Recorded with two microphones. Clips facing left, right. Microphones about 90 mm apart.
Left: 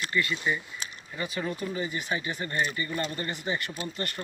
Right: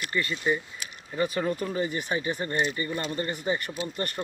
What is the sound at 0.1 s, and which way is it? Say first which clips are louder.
Speech: right 2 dB; 35° right (ahead or behind).